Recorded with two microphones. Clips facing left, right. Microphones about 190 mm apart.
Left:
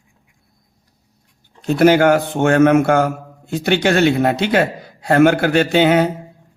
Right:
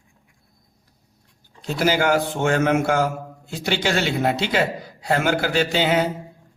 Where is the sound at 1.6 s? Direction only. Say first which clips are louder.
Left 9 dB; 60° left (ahead or behind).